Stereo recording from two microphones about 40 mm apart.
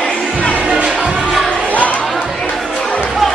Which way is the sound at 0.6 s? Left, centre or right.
Right.